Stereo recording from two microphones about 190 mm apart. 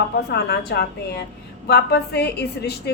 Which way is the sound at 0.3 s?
60° left (ahead or behind).